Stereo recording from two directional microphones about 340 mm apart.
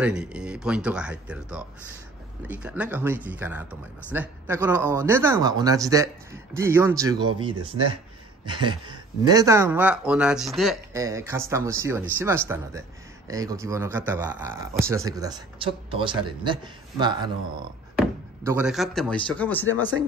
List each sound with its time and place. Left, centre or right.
0.0 s speech: centre
8.5 s speech: centre